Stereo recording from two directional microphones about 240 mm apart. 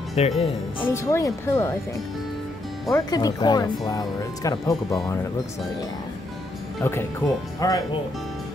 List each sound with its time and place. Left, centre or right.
0.2 s speech: left
0.8 s speech: centre
2.9 s speech: centre
6.8 s speech: centre